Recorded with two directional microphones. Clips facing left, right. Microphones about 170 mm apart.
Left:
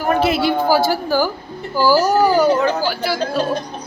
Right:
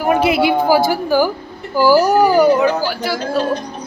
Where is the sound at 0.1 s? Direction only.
15° right (ahead or behind).